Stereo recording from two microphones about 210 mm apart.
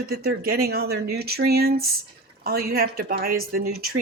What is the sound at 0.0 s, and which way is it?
Speech, 45° right (ahead or behind).